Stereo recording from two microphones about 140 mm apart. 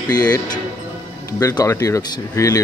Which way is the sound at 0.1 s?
25° left (ahead or behind).